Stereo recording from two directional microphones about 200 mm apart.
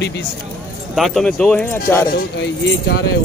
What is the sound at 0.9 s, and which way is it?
Speech, centre (ahead or behind).